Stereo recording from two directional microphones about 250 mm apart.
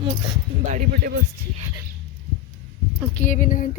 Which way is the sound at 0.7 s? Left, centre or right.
Right.